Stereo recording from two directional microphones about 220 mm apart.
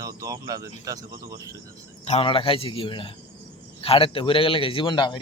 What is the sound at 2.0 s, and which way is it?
A man's voice, 30° left (ahead or behind).